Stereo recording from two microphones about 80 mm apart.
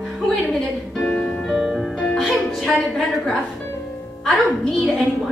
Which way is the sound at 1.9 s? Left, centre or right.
Centre.